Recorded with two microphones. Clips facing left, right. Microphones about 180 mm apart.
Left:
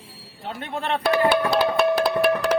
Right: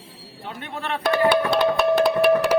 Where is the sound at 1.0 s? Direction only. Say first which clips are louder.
Right 1 dB; centre (ahead or behind).